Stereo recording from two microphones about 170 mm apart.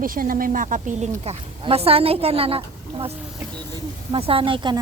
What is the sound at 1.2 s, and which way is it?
Speech, 35° right (ahead or behind).